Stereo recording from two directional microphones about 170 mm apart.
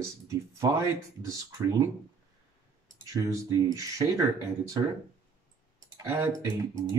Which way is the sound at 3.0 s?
20° right (ahead or behind).